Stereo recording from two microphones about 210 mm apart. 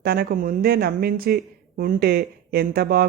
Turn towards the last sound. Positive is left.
turn(degrees=-45)  # may be behind; listen again after turning